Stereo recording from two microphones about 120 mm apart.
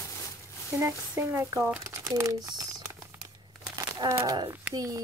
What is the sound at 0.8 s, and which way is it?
A child's voice, 20° right (ahead or behind).